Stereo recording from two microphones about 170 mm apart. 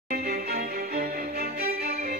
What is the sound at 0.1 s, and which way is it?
Music, 60° right (ahead or behind).